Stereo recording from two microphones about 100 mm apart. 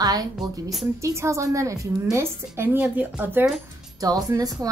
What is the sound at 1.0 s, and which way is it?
A woman's voice, 30° right (ahead or behind).